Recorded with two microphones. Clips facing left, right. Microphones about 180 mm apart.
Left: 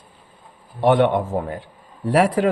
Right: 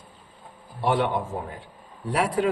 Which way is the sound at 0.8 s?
65° left (ahead or behind).